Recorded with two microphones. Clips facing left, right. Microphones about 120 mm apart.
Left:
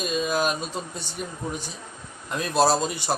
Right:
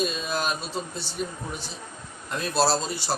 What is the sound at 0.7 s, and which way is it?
Speech, 50° left (ahead or behind).